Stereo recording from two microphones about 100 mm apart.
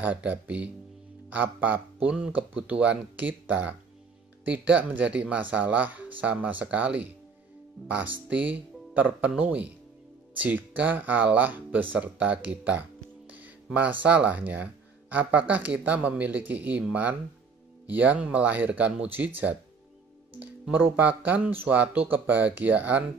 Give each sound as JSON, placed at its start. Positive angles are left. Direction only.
{"t": 0.0, "sound": "speech", "side_deg": -15}